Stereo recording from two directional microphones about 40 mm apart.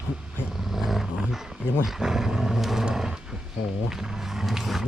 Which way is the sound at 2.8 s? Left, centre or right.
Centre.